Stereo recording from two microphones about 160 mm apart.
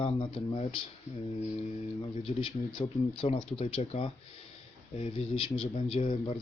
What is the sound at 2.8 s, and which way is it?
A man's voice, 40° left (ahead or behind).